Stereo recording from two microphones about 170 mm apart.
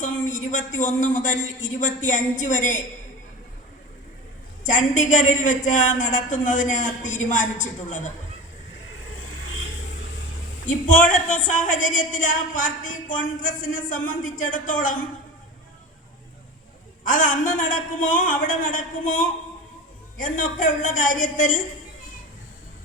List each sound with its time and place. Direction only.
0.3 s a woman's voice: 50° left (ahead or behind)
4.6 s a woman's voice: 50° left (ahead or behind)
10.7 s a woman's voice: 50° left (ahead or behind)
17.0 s a woman's voice: 50° left (ahead or behind)